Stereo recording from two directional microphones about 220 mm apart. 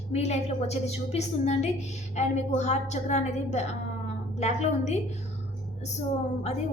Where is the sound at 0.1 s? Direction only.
30° left (ahead or behind).